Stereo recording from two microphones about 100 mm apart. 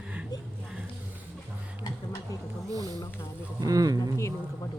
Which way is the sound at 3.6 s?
35° right (ahead or behind).